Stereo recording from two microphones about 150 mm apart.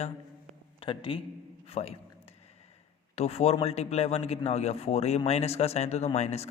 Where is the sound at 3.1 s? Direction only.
45° left (ahead or behind).